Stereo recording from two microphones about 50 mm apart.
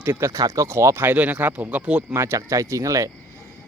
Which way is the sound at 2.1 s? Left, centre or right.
Right.